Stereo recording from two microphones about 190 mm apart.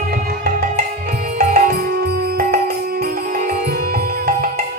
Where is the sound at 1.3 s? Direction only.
50° right (ahead or behind).